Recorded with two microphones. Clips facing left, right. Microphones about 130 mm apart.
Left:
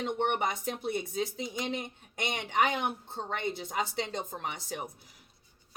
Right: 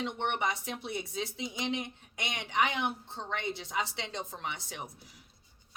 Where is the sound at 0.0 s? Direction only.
45° left (ahead or behind).